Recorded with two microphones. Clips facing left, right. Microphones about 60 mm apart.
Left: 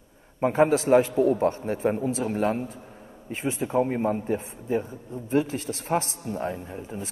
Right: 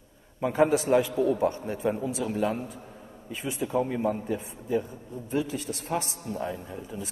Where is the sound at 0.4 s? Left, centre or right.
Left.